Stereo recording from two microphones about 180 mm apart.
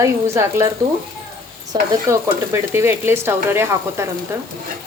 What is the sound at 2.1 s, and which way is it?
A woman's voice, 15° right (ahead or behind).